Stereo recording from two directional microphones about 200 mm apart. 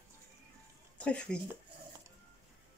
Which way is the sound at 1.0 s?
5° left (ahead or behind).